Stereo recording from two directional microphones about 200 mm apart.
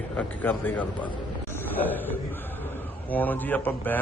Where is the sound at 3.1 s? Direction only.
10° left (ahead or behind).